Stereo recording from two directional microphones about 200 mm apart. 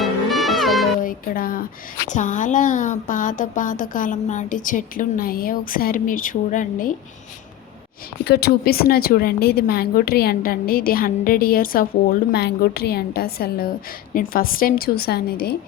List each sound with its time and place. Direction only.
0.0 s music: centre (ahead or behind)
1.0 s a woman's voice: 45° left (ahead or behind)
8.2 s a woman's voice: 55° left (ahead or behind)